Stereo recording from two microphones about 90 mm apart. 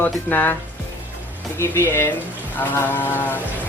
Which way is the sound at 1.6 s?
30° left (ahead or behind).